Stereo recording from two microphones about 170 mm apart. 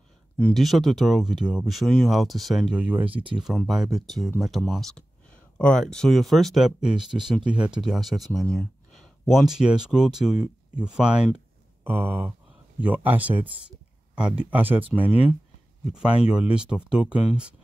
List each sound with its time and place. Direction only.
0.4 s speech: 5° left (ahead or behind)
3.0 s speech: 30° right (ahead or behind)
3.4 s speech: centre (ahead or behind)
8.4 s a sound: centre (ahead or behind)
9.3 s speech: centre (ahead or behind)
15.0 s speech: 35° left (ahead or behind)
16.5 s speech: 5° right (ahead or behind)